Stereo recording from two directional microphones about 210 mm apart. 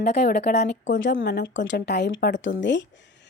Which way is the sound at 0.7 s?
60° left (ahead or behind).